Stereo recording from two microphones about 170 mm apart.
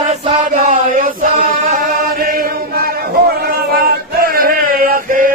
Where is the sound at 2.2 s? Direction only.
60° right (ahead or behind).